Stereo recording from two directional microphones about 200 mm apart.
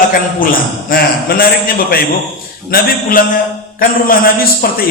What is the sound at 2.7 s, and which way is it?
Speech, 45° left (ahead or behind).